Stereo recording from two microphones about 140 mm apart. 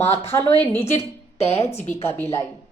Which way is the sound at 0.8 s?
50° left (ahead or behind).